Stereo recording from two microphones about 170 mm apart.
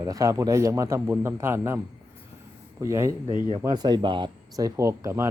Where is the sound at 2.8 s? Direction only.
15° right (ahead or behind).